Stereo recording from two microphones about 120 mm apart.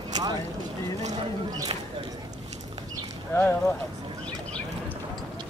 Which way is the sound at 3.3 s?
20° left (ahead or behind).